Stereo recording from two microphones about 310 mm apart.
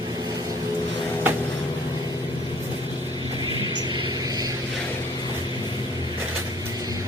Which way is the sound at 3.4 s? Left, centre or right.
Centre.